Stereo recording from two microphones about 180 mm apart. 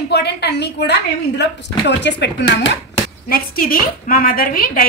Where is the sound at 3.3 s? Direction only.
50° left (ahead or behind).